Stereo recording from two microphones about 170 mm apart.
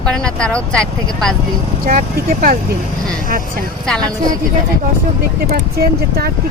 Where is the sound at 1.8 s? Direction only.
55° right (ahead or behind).